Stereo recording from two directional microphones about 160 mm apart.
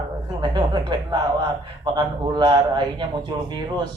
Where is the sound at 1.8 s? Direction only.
30° right (ahead or behind).